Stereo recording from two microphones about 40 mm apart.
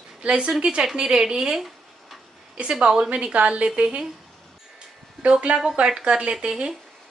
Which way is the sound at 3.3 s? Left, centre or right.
Right.